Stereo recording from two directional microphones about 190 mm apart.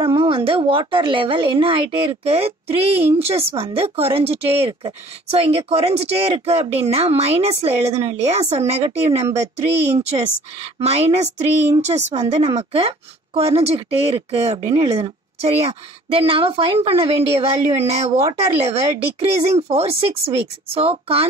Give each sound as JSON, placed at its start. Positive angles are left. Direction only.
{"t": 0.0, "sound": "a woman's voice", "side_deg": -25}